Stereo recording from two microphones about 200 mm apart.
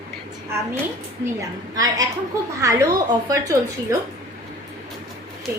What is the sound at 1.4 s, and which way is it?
A woman's voice, 15° right (ahead or behind).